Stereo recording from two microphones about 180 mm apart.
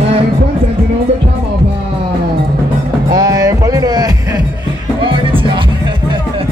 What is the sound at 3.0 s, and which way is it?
Music, 20° right (ahead or behind).